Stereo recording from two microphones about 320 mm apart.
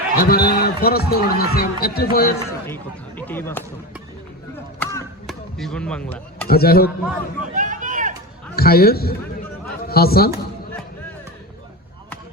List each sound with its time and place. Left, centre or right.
0.2 s speech: left
2.5 s speech: centre
4.8 s chop: centre
5.2 s speech: centre
6.5 s speech: left
7.5 s a sound: right
8.5 s a man's voice: left